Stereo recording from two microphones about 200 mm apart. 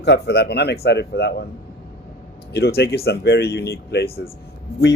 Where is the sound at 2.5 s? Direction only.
55° left (ahead or behind).